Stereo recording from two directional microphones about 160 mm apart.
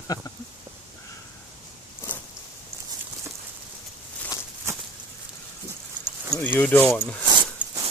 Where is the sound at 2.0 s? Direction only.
15° left (ahead or behind).